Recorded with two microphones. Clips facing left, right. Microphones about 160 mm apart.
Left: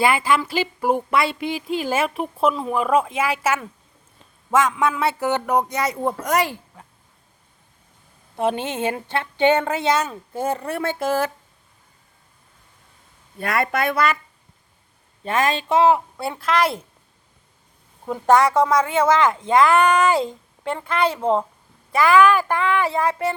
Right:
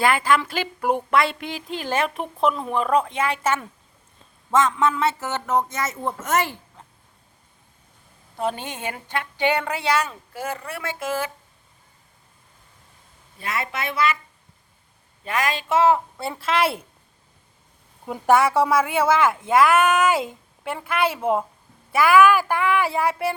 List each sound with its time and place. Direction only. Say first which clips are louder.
0.0 s speech: left 1 dB; 5° left (ahead or behind)
8.4 s a woman's voice: left 5 dB; 20° left (ahead or behind)
13.4 s speech: left 7 dB; 55° left (ahead or behind)
15.2 s a woman's voice: left 4 dB; 25° left (ahead or behind)
16.1 s speech: left 2 dB; centre (ahead or behind)
18.1 s speech: left 2 dB; 10° right (ahead or behind)